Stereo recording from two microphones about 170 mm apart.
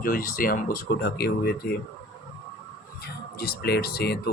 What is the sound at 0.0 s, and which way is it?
Speech, 60° left (ahead or behind).